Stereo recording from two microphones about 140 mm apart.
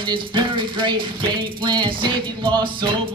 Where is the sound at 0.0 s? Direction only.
35° right (ahead or behind).